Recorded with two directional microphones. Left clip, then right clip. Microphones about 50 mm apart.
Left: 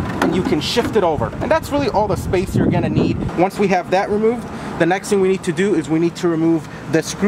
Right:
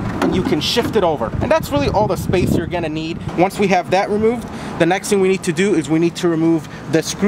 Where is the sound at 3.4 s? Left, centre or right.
Right.